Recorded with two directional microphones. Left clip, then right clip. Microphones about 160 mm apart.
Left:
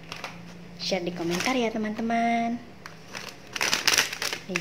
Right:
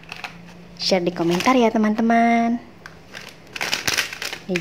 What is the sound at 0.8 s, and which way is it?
Speech, 40° right (ahead or behind).